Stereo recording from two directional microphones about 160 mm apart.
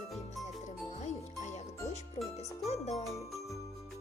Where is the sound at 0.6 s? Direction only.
45° left (ahead or behind).